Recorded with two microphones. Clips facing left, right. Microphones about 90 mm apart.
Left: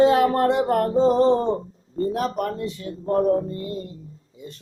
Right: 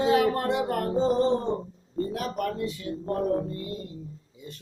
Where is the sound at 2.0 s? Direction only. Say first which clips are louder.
Left 5 dB; 35° left (ahead or behind).